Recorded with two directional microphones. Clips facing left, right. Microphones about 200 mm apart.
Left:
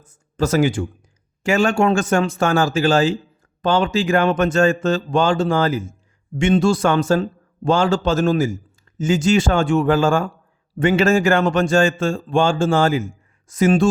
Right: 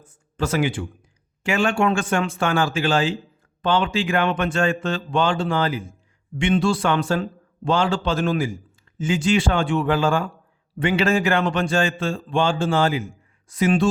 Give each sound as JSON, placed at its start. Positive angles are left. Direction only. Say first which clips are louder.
{"t": 0.0, "sound": "speech", "louder": "left 5 dB", "side_deg": 40}